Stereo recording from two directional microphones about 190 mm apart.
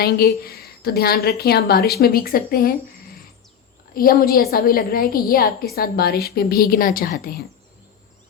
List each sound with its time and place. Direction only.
0.4 s a woman's voice: 55° left (ahead or behind)
3.9 s a woman's voice: 50° left (ahead or behind)